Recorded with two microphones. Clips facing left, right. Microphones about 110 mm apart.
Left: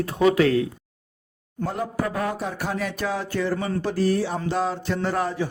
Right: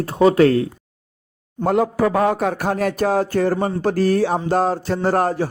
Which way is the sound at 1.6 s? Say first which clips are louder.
Right 9 dB; 85° right.